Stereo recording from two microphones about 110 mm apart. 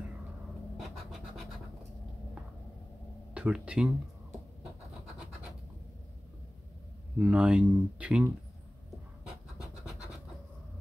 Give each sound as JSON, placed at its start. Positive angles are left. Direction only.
{"t": 0.7, "sound": "scratch", "side_deg": 0}
{"t": 3.3, "sound": "speech", "side_deg": -10}
{"t": 7.2, "sound": "speech", "side_deg": -10}